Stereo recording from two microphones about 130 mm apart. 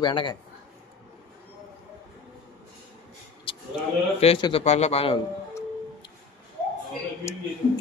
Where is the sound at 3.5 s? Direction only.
40° left (ahead or behind).